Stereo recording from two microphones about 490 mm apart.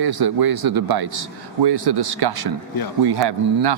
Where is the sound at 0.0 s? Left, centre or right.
Right.